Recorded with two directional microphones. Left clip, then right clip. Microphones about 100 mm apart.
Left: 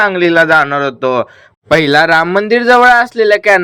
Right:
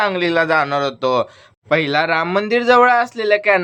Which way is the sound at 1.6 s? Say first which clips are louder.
Left 8 dB; 55° left (ahead or behind).